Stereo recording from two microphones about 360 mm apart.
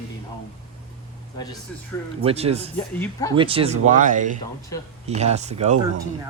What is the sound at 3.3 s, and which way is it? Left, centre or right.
Speech, centre.